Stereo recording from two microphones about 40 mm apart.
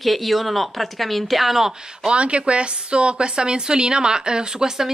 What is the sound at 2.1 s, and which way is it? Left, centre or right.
A woman's voice, right.